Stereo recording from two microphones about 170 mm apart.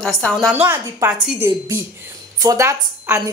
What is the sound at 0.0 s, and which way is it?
Speech, 5° left (ahead or behind).